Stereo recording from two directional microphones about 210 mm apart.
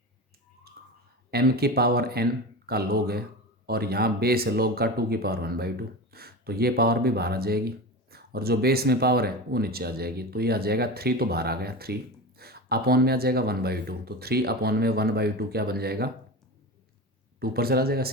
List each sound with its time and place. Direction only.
0.8 s clicking: 50° right (ahead or behind)
1.3 s speech: 50° right (ahead or behind)
17.4 s speech: 45° right (ahead or behind)